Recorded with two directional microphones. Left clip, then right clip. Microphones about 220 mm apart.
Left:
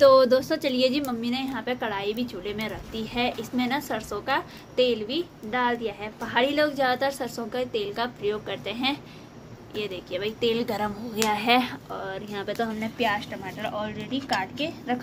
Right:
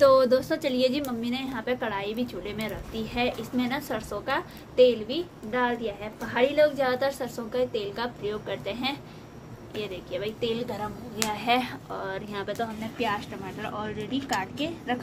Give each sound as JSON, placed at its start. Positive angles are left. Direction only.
{"t": 0.0, "sound": "a woman's voice", "side_deg": 10}
{"t": 11.9, "sound": "a woman's voice", "side_deg": 5}